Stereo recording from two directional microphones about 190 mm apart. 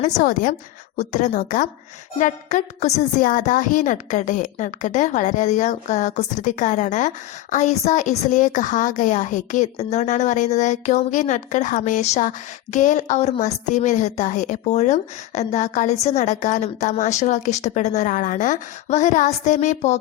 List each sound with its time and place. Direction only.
0.0 s a woman's voice: 45° left (ahead or behind)